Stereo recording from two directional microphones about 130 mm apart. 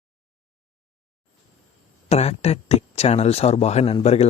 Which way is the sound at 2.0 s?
55° left (ahead or behind).